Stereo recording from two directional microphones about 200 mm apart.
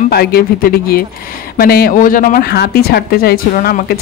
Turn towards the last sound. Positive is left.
turn(degrees=50)  # may be behind; listen again after turning